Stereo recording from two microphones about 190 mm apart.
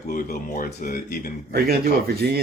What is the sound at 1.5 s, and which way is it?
Speech, 55° right (ahead or behind).